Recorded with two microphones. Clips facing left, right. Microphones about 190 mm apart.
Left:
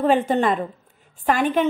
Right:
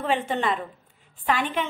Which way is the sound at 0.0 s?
40° left (ahead or behind).